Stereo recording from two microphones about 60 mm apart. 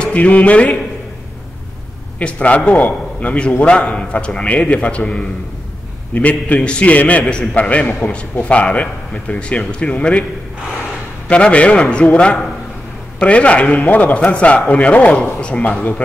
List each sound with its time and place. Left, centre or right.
0.0 s a man's voice: left
2.1 s a man's voice: left
11.2 s a man's voice: left
13.2 s a man's voice: left